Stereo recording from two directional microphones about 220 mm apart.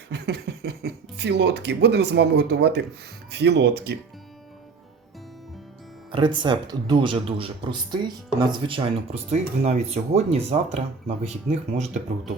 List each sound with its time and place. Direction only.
0.1 s speech: 50° right (ahead or behind)
6.1 s speech: 20° right (ahead or behind)